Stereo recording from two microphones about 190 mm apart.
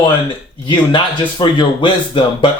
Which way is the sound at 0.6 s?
25° left (ahead or behind).